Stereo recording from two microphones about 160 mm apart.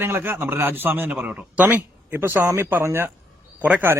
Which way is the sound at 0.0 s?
15° right (ahead or behind).